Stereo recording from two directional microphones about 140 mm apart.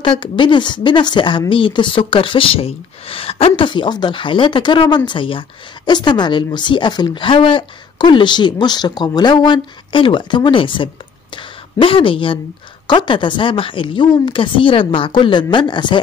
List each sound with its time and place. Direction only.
0.0 s speech: 35° left (ahead or behind)